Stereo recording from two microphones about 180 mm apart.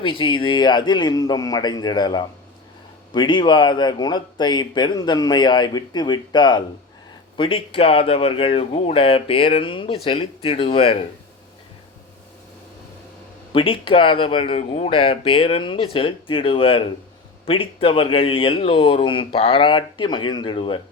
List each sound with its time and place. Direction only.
0.0 s a man's voice: 30° left (ahead or behind)
13.5 s a man's voice: 30° left (ahead or behind)